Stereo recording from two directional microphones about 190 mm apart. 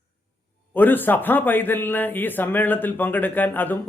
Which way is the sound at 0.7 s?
10° left (ahead or behind).